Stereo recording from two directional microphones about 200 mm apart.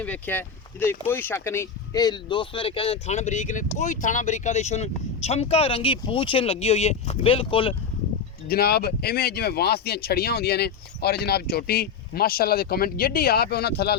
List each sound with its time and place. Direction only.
0.0 s speech: 10° left (ahead or behind); by 7.8 s 25° left (ahead or behind)
8.4 s speech: 50° left (ahead or behind)